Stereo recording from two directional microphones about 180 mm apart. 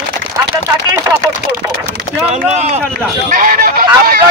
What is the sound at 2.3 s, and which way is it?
Speech, 40° right (ahead or behind).